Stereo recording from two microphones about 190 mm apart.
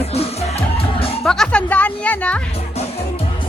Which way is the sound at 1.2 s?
5° left (ahead or behind).